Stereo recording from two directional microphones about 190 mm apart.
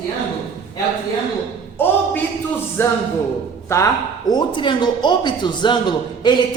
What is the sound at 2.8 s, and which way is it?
Speech, 15° left (ahead or behind).